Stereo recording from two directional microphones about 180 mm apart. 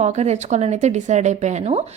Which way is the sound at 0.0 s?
40° right (ahead or behind).